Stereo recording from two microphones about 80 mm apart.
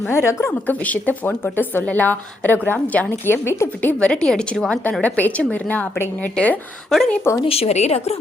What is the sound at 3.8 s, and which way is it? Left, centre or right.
A woman's voice, centre.